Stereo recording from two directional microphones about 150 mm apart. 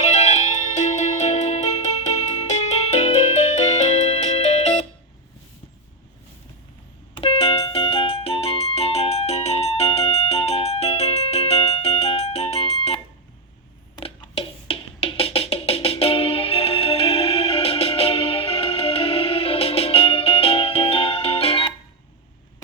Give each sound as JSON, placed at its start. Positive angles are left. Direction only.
{"t": 0.0, "sound": "music", "side_deg": 50}
{"t": 7.1, "sound": "music", "side_deg": 35}